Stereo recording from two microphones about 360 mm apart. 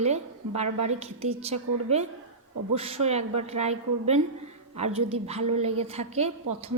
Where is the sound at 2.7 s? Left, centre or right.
Centre.